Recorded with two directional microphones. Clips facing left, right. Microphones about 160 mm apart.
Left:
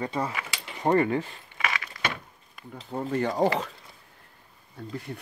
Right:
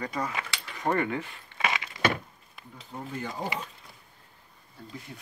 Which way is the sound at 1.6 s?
20° right (ahead or behind).